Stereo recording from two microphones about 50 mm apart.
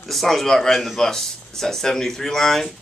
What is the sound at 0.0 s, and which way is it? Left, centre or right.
Speech, centre.